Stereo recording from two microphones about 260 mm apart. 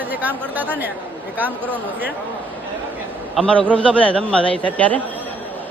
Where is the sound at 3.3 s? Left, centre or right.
Centre.